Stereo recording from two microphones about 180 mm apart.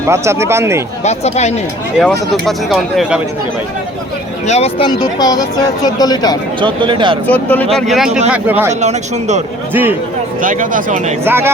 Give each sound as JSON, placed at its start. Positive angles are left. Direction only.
{"t": 0.0, "sound": "speech", "side_deg": -15}
{"t": 1.0, "sound": "speech", "side_deg": 40}
{"t": 2.0, "sound": "speech", "side_deg": 5}
{"t": 4.4, "sound": "speech", "side_deg": 35}
{"t": 4.9, "sound": "speech", "side_deg": 20}
{"t": 6.6, "sound": "speech", "side_deg": -25}
{"t": 7.3, "sound": "speech", "side_deg": 10}
{"t": 8.8, "sound": "speech", "side_deg": -40}
{"t": 10.4, "sound": "speech", "side_deg": -50}
{"t": 11.3, "sound": "speech", "side_deg": -10}